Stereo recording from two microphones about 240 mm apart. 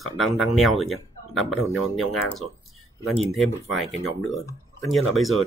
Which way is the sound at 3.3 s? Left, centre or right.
Centre.